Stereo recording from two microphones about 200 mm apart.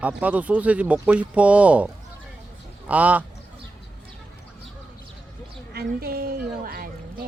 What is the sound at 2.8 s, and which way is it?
Speech, 5° right (ahead or behind).